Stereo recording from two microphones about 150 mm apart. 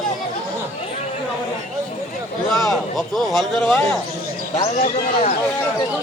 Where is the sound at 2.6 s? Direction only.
Centre (ahead or behind).